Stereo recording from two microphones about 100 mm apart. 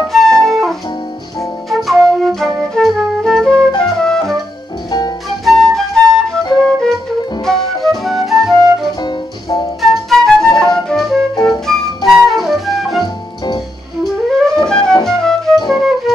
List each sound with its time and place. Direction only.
0.1 s music: 5° left (ahead or behind)
1.7 s flute: centre (ahead or behind)
5.4 s flute: 5° left (ahead or behind)
7.4 s music: 5° left (ahead or behind)
9.0 s music: 45° left (ahead or behind)
9.8 s flute: centre (ahead or behind)
11.4 s music: 5° left (ahead or behind)
14.0 s flute: 5° left (ahead or behind)
15.0 s music: 5° left (ahead or behind)